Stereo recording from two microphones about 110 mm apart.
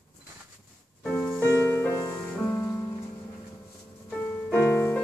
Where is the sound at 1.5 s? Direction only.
20° left (ahead or behind).